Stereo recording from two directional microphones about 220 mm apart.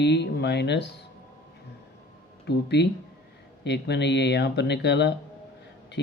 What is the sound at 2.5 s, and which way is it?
Speech, 50° left (ahead or behind).